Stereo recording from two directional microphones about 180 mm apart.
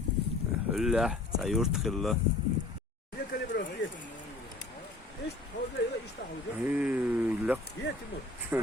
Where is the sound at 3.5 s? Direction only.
65° left (ahead or behind).